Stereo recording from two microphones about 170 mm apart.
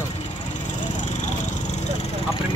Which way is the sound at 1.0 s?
45° left (ahead or behind).